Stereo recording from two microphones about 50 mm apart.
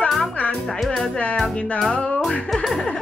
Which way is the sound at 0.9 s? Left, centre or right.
Centre.